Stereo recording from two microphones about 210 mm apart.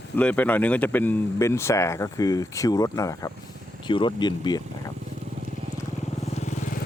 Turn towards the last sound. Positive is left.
turn(degrees=35)  # may be behind; listen again after turning